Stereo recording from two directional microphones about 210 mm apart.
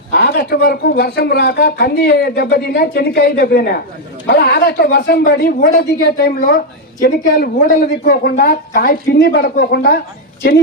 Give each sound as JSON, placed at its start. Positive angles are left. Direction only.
{"t": 0.1, "sound": "a man's voice", "side_deg": 50}